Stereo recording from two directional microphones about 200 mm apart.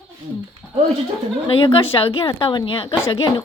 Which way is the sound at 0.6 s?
5° left (ahead or behind).